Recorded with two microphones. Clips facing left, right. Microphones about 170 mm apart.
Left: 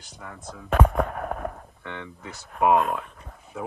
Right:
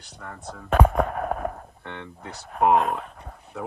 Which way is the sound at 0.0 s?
60° right (ahead or behind).